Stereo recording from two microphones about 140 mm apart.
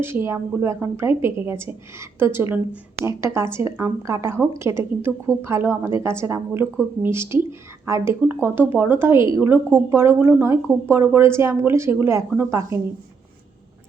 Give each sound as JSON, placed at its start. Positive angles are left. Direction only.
{"t": 0.0, "sound": "a woman's voice", "side_deg": -15}